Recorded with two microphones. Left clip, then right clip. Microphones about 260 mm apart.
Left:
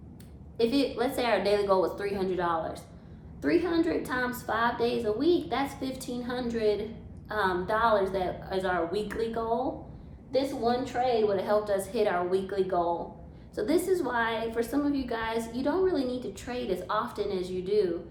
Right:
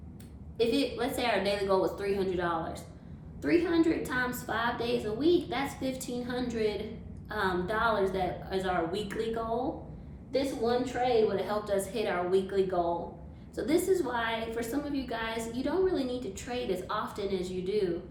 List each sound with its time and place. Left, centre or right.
0.5 s a woman's voice: left